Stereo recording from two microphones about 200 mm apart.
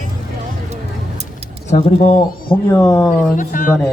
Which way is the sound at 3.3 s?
40° left (ahead or behind).